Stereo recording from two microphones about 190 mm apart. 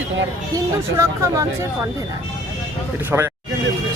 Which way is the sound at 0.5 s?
15° right (ahead or behind).